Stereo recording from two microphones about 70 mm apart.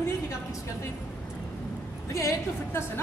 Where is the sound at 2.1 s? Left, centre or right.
Left.